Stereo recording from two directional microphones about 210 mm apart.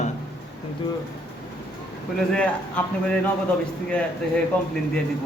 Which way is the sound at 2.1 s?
5° left (ahead or behind).